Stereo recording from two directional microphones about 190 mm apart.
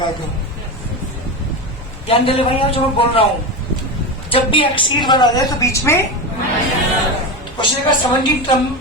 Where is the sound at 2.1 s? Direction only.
30° left (ahead or behind).